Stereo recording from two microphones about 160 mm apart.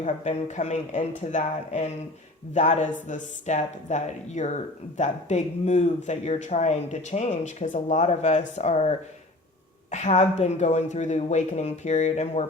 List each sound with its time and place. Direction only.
0.0 s speech: 50° left (ahead or behind)
9.9 s speech: 45° left (ahead or behind)